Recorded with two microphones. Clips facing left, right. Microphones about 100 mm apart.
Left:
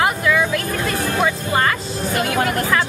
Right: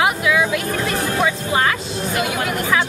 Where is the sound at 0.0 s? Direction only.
5° right (ahead or behind).